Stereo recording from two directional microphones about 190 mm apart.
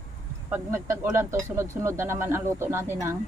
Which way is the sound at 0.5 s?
15° right (ahead or behind).